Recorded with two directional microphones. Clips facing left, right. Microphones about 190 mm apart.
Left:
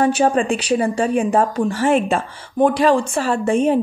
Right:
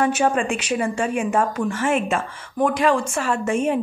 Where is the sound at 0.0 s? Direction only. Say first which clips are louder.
Left 4 dB; 35° left (ahead or behind).